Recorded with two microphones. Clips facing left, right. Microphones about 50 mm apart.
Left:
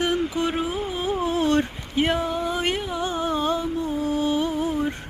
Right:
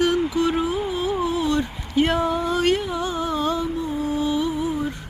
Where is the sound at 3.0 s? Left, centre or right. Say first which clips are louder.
Even; left.